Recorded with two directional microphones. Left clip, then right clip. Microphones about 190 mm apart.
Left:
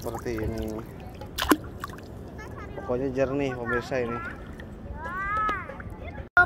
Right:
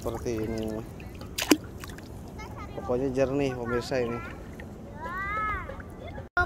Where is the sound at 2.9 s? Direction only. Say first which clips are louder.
Even; 25° right (ahead or behind).